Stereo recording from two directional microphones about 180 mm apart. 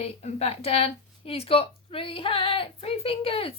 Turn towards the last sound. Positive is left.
turn(degrees=30)  # may be behind; listen again after turning